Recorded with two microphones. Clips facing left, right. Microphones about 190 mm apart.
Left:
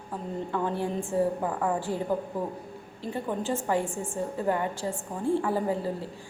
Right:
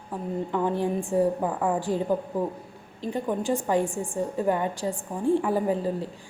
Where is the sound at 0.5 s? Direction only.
15° right (ahead or behind).